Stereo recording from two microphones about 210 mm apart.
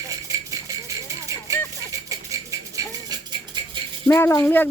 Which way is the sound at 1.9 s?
15° right (ahead or behind).